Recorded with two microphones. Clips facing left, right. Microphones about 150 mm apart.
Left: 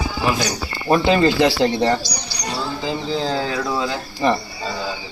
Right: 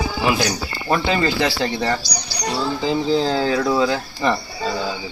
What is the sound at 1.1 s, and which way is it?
Speech, 25° left (ahead or behind).